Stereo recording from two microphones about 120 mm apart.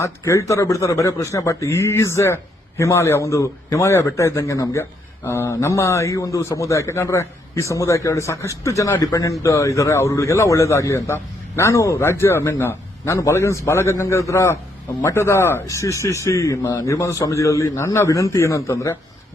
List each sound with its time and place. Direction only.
0.0 s a man's voice: 25° left (ahead or behind)